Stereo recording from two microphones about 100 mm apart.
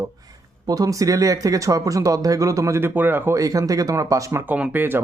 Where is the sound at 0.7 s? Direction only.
35° right (ahead or behind); by 3.3 s 20° right (ahead or behind).